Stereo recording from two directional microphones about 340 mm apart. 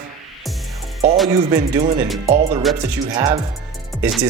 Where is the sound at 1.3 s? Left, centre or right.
Centre.